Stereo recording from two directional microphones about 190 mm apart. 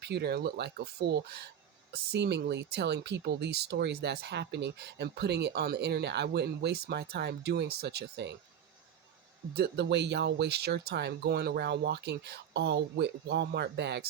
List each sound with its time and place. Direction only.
0.0 s speech: 60° right (ahead or behind)
9.6 s speech: 65° right (ahead or behind)